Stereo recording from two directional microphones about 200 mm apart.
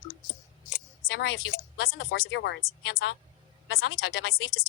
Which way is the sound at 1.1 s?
65° left (ahead or behind).